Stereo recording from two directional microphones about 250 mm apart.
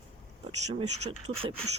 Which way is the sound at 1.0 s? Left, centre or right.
Right.